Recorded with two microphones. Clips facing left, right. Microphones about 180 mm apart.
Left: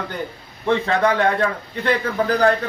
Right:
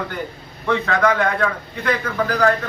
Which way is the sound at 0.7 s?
30° left (ahead or behind).